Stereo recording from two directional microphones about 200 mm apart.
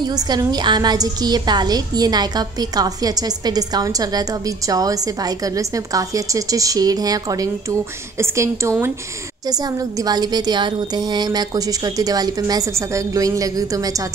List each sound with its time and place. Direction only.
0.0 s a woman's voice: 20° right (ahead or behind)